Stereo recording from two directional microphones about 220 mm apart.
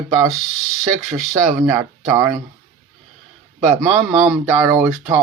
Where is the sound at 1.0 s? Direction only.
35° right (ahead or behind).